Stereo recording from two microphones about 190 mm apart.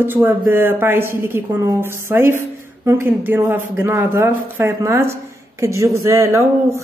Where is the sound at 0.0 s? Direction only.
10° right (ahead or behind).